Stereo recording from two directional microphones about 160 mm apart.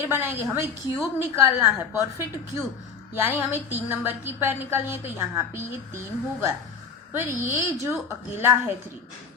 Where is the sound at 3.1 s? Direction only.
15° right (ahead or behind).